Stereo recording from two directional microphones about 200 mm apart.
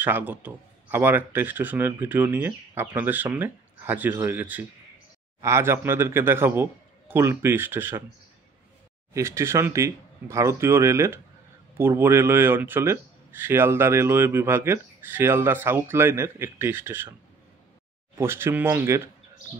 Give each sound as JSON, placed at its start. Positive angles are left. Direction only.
{"t": 0.0, "sound": "speech", "side_deg": -10}
{"t": 9.1, "sound": "speech", "side_deg": -15}
{"t": 18.1, "sound": "speech", "side_deg": -10}